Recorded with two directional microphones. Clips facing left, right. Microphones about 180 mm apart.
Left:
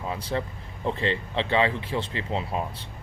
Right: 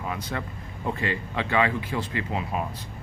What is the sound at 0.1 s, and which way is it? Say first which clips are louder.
Speech: left 6 dB; 30° left (ahead or behind).